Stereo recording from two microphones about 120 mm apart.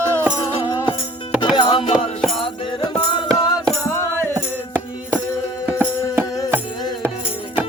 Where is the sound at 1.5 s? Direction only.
40° left (ahead or behind).